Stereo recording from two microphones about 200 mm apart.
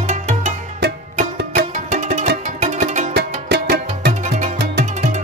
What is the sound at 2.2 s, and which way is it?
Music, 50° right (ahead or behind).